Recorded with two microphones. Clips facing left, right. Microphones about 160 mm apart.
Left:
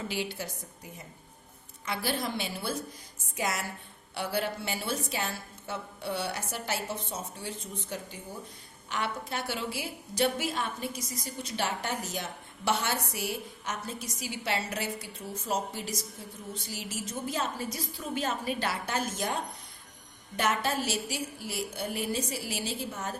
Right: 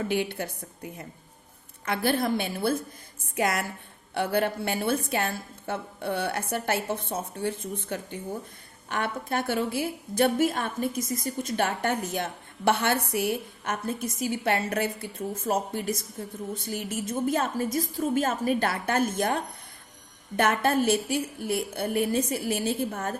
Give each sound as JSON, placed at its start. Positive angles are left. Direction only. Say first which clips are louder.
{"t": 0.0, "sound": "a woman's voice", "louder": "right 7 dB", "side_deg": -55}